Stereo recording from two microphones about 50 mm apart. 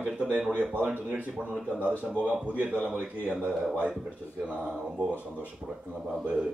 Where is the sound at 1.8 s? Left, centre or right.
Right.